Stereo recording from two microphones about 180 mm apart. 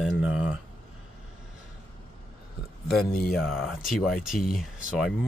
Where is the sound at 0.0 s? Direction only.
5° right (ahead or behind).